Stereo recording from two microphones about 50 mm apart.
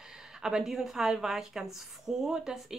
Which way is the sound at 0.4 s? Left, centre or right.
Centre.